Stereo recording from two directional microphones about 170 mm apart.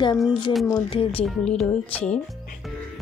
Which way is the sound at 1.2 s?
5° left (ahead or behind).